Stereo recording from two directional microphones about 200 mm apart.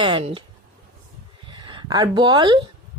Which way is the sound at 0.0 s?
25° right (ahead or behind).